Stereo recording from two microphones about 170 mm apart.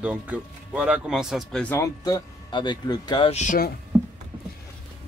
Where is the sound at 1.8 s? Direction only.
20° left (ahead or behind).